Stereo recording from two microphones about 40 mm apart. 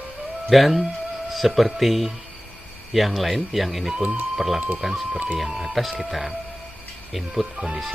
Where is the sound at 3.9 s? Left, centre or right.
Right.